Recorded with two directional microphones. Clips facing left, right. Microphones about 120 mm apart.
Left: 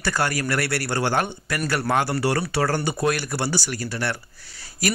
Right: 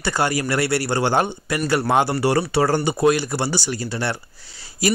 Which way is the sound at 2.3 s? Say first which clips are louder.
Right 4 dB; 20° right (ahead or behind).